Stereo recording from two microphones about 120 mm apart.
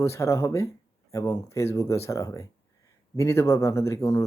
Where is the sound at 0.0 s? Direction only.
25° left (ahead or behind).